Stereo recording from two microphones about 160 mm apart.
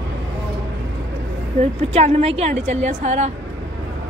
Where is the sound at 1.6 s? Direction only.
45° right (ahead or behind).